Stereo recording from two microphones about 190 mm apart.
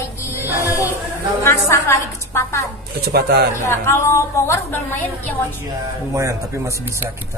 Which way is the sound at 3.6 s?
15° left (ahead or behind).